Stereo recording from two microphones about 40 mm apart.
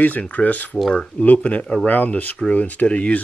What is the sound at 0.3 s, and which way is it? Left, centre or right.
Speech, left.